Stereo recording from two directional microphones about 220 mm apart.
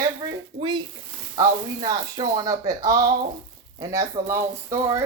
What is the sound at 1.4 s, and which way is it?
Speech, 15° right (ahead or behind).